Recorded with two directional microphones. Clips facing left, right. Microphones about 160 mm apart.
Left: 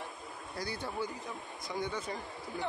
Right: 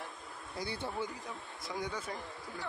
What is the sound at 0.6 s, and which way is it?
Speech, 25° right (ahead or behind).